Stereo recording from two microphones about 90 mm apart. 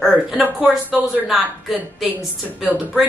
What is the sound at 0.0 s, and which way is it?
Speech, 10° right (ahead or behind).